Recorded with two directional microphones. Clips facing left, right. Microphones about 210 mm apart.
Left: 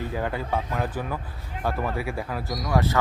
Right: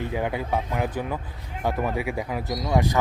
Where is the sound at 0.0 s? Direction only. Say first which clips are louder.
Right 2 dB; 15° right (ahead or behind).